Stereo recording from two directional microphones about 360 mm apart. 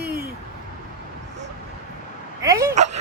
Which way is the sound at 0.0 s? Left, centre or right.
Right.